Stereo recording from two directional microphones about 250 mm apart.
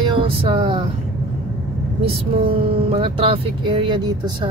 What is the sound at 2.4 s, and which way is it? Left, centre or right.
Speech, right.